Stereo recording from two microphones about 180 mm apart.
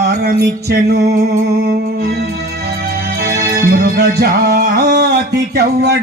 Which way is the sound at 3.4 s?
60° right (ahead or behind).